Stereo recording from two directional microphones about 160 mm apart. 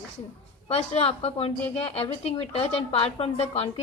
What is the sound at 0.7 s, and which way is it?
A woman's voice, 40° left (ahead or behind).